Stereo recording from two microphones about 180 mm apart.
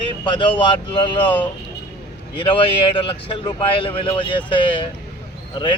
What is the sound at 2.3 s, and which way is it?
Speech, 25° left (ahead or behind).